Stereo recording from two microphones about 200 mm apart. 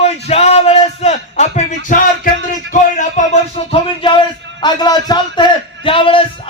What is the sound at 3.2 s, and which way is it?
Music, 40° left (ahead or behind).